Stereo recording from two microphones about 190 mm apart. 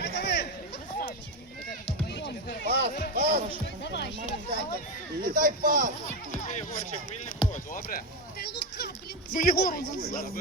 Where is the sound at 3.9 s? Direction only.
65° left (ahead or behind).